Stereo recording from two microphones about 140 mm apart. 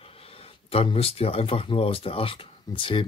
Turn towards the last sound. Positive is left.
turn(degrees=35)  # may be behind; listen again after turning